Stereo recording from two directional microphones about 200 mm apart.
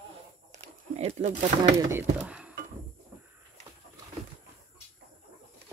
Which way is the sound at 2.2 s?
5° right (ahead or behind).